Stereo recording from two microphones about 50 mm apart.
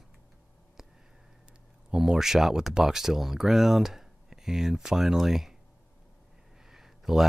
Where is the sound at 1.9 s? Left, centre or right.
Centre.